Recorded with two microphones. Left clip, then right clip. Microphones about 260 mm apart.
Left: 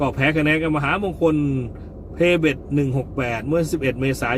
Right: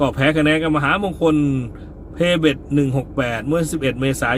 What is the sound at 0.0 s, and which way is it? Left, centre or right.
A man's voice, centre.